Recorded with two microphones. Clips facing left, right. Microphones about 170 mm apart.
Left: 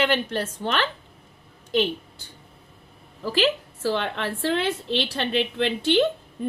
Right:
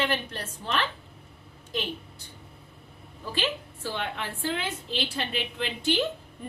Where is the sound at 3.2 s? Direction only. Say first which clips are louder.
Left 8 dB; 90° left; by 6.0 s 70° left (ahead or behind).